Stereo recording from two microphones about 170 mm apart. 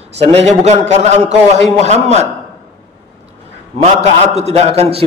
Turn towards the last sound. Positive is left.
turn(degrees=-35)  # may be behind; listen again after turning